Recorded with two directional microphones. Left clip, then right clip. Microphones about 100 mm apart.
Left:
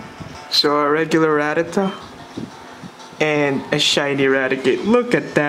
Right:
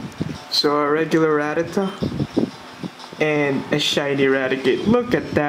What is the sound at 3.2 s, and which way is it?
Speech, 30° left (ahead or behind).